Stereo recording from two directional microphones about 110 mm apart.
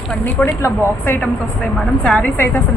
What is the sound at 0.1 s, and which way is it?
Speech, 10° left (ahead or behind).